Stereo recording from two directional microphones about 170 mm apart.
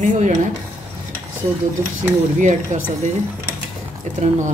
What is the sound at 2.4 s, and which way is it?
Speech, 45° right (ahead or behind).